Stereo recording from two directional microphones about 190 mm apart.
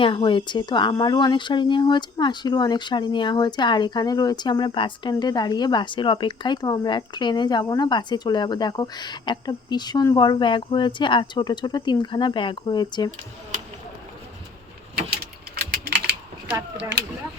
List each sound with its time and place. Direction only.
0.0 s speech: 25° left (ahead or behind)
15.1 s typing: 60° right (ahead or behind)